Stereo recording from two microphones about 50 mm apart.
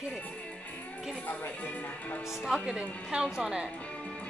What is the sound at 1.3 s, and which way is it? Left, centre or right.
Speech, left.